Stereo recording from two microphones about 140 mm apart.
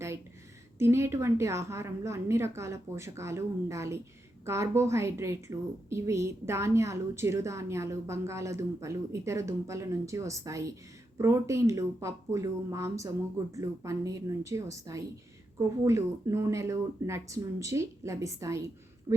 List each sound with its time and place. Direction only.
0.8 s a woman's voice: 20° right (ahead or behind)